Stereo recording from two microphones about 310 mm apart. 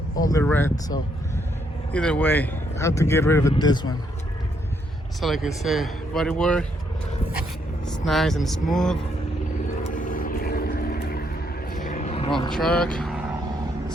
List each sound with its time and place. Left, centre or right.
0.3 s speech: centre
5.2 s speech: centre
7.9 s speech: centre
9.8 s vehicle: left
12.5 s speech: centre